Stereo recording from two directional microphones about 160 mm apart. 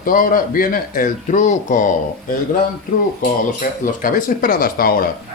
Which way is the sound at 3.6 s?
60° left (ahead or behind).